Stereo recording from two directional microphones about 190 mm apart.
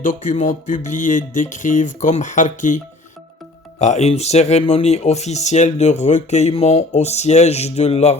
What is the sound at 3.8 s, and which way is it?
Speech, 35° left (ahead or behind).